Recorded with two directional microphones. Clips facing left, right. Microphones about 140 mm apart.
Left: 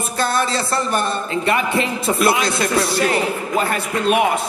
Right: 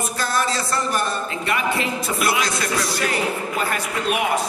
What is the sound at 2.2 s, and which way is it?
A man's voice, 25° left (ahead or behind).